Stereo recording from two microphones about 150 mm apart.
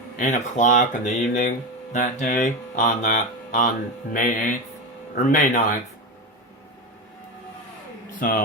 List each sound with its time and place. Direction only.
0.2 s speech: 55° left (ahead or behind)